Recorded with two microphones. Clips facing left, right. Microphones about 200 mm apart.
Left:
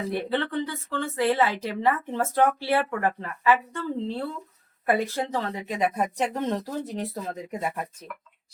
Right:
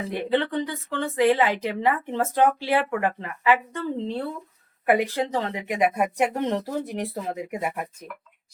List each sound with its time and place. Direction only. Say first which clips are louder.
0.1 s a woman's voice: right 5 dB; 15° right (ahead or behind)